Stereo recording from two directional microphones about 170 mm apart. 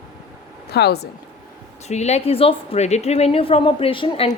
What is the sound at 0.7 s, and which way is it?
Speech, 70° left (ahead or behind).